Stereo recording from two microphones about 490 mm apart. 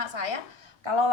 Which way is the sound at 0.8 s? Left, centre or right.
Right.